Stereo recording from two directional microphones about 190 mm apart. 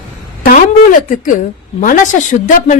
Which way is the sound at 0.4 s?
45° left (ahead or behind).